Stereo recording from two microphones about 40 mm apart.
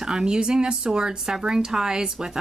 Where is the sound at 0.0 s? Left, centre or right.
Centre.